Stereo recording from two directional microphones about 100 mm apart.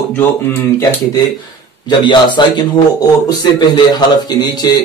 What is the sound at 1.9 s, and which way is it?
A man's voice, 50° left (ahead or behind).